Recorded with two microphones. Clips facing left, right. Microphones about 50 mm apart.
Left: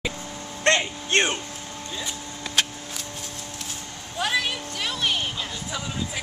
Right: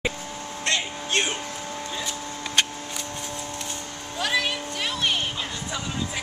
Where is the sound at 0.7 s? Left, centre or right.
Left.